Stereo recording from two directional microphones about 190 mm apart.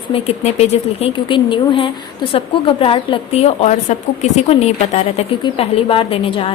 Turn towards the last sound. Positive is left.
turn(degrees=30)  # may be behind; listen again after turning